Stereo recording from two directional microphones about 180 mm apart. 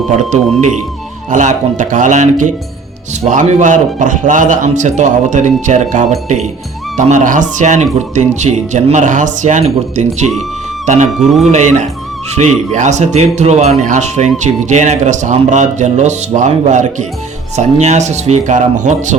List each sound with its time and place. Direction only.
0.2 s a man's voice: 40° right (ahead or behind)